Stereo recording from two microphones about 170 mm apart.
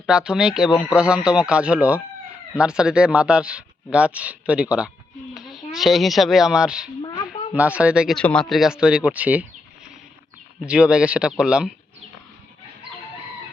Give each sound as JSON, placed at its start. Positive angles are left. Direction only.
{"t": 0.0, "sound": "speech", "side_deg": -5}
{"t": 10.7, "sound": "speech", "side_deg": -5}